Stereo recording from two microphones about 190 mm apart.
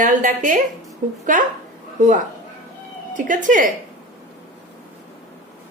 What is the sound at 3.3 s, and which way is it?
Speech, 45° right (ahead or behind).